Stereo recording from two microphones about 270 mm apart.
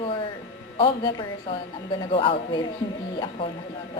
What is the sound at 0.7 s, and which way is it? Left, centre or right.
Speech, centre.